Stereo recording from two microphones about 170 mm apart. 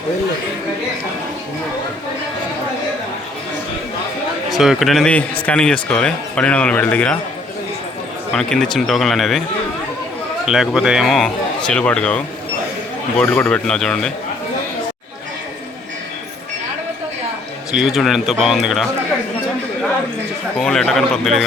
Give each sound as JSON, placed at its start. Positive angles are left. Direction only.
{"t": 4.5, "sound": "speech", "side_deg": 0}
{"t": 8.3, "sound": "a man's voice", "side_deg": 5}
{"t": 10.4, "sound": "a man's voice", "side_deg": 0}
{"t": 17.7, "sound": "a man's voice", "side_deg": -5}
{"t": 20.6, "sound": "a man's voice", "side_deg": 5}